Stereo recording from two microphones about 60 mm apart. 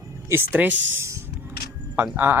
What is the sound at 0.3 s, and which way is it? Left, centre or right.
Speech, right.